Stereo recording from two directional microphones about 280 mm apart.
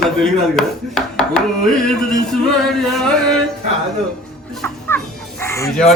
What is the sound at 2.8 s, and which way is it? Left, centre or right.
Speech, centre.